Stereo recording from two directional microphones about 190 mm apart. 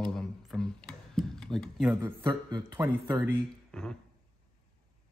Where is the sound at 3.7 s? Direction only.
5° left (ahead or behind).